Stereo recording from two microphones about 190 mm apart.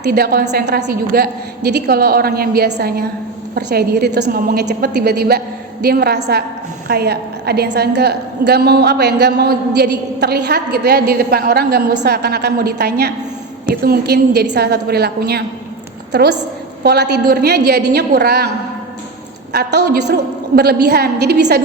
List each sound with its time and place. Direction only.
0.0 s a woman's voice: 55° right (ahead or behind)
19.5 s a woman's voice: 60° right (ahead or behind)